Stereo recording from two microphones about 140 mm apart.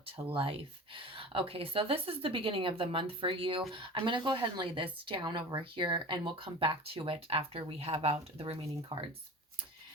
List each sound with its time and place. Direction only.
0.0 s a woman's voice: 40° right (ahead or behind)